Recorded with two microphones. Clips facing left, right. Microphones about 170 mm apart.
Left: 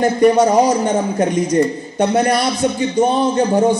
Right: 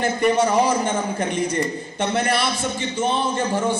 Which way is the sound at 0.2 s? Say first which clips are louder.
Left 6 dB; 40° left (ahead or behind).